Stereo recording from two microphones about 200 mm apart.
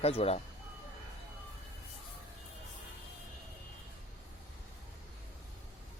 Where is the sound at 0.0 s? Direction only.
30° left (ahead or behind).